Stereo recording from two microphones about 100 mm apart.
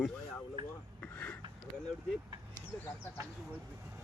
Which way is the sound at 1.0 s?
15° left (ahead or behind).